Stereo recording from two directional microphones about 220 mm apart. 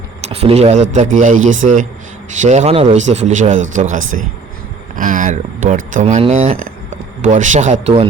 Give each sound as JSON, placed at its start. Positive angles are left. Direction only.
{"t": 0.3, "sound": "speech", "side_deg": -25}
{"t": 4.9, "sound": "a sound", "side_deg": -35}
{"t": 5.9, "sound": "speech", "side_deg": -35}